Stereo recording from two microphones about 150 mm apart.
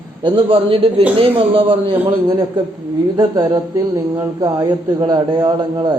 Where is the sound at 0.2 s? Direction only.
35° right (ahead or behind).